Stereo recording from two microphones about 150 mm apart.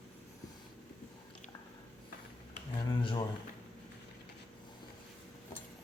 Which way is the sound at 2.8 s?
35° left (ahead or behind).